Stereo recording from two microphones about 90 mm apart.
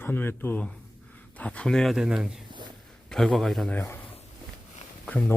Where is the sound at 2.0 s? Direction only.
10° right (ahead or behind).